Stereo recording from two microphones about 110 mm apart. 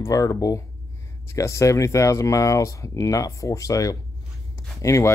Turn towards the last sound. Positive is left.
turn(degrees=30)  # may be behind; listen again after turning